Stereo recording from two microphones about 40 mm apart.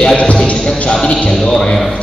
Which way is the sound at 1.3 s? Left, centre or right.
Centre.